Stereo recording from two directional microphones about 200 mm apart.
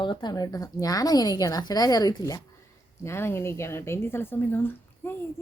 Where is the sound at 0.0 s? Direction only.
25° left (ahead or behind).